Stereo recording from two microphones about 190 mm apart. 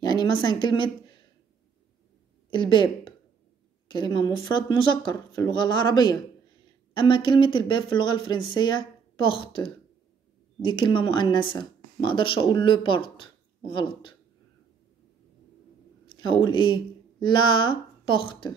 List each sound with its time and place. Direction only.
0.0 s a woman's voice: 20° left (ahead or behind)
2.5 s speech: 25° left (ahead or behind)
10.6 s speech: 25° left (ahead or behind)
16.2 s speech: 25° left (ahead or behind)